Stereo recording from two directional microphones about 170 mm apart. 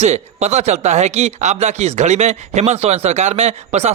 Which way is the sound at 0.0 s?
40° right (ahead or behind).